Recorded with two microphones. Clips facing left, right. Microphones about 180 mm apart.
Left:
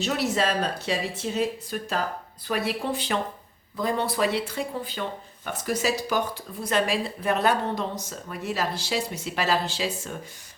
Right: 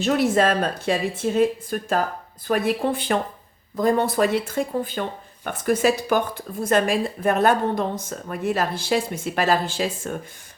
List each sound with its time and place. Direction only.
0.0 s speech: 50° right (ahead or behind)